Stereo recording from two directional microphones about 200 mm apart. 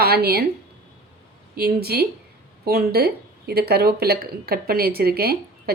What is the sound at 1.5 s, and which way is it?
A woman's voice, 50° right (ahead or behind).